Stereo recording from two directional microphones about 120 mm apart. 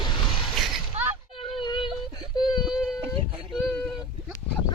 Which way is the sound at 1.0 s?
60° right (ahead or behind).